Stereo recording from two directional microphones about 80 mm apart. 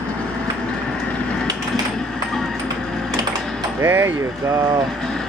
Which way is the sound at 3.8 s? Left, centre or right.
Right.